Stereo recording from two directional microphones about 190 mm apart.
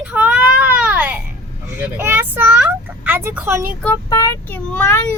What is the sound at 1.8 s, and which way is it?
Vehicle, 10° right (ahead or behind).